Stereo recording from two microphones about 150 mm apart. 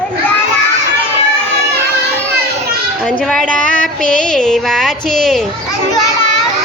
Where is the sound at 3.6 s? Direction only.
60° left (ahead or behind).